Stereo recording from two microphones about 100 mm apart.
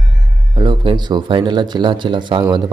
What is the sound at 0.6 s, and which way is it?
Speech, 55° right (ahead or behind).